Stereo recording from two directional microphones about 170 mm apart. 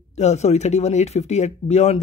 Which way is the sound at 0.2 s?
40° left (ahead or behind).